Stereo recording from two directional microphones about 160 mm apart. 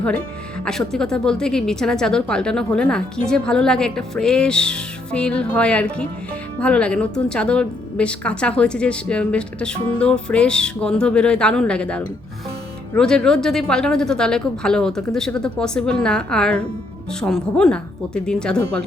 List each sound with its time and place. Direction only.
0.6 s a woman's voice: 5° left (ahead or behind)